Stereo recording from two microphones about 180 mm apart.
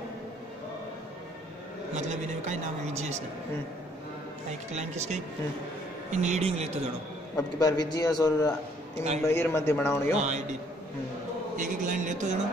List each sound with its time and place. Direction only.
2.0 s a woman's voice: 40° right (ahead or behind)
4.7 s a woman's voice: 40° right (ahead or behind)
7.3 s a man's voice: 20° left (ahead or behind)
10.1 s a woman's voice: 40° right (ahead or behind)
11.5 s speech: 45° right (ahead or behind)